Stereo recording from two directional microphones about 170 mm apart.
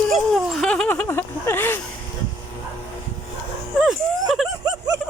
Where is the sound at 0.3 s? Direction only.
Centre (ahead or behind).